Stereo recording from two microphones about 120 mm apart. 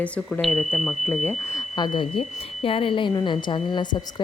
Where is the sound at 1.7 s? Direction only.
40° left (ahead or behind).